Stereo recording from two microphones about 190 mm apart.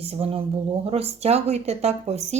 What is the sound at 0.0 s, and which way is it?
Speech, 30° right (ahead or behind).